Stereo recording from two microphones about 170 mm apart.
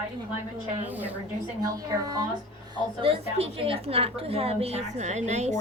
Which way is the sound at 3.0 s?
35° right (ahead or behind).